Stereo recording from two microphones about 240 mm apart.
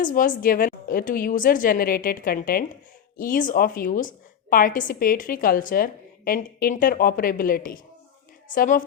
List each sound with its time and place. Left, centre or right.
0.0 s a woman's voice: left